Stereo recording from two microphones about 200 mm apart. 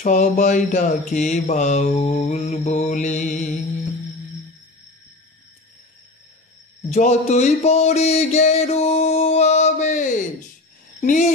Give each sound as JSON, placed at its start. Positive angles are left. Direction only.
{"t": 0.0, "sound": "mantra", "side_deg": 40}
{"t": 6.8, "sound": "mantra", "side_deg": 35}
{"t": 11.0, "sound": "speech", "side_deg": 40}